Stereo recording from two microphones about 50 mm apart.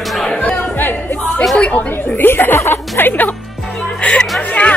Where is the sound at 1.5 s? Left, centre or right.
Left.